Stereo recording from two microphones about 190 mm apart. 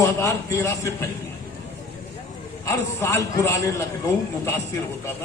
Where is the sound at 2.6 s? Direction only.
15° left (ahead or behind).